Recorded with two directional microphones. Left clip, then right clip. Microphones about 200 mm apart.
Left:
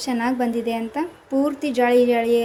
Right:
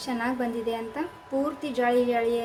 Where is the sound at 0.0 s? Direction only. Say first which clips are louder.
Left 6 dB; 30° left (ahead or behind).